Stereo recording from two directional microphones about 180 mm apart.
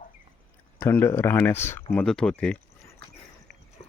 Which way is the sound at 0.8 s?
15° left (ahead or behind).